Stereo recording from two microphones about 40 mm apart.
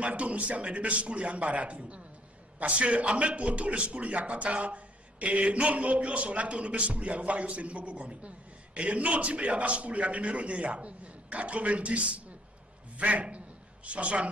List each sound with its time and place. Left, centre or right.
0.0 s a man's voice: right